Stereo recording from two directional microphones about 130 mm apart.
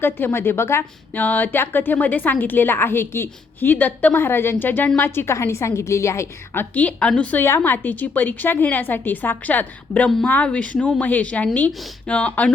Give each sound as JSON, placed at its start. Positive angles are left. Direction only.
{"t": 0.0, "sound": "a woman's voice", "side_deg": 15}